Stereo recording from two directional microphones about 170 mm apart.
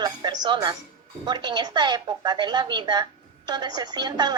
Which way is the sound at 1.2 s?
25° right (ahead or behind).